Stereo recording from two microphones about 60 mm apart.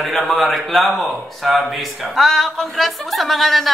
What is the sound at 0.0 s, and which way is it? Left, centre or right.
A man's voice, centre.